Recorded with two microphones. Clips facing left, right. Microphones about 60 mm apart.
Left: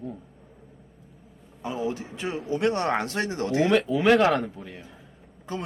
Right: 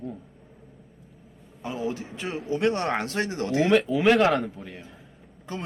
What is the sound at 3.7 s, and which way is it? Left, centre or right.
Speech, centre.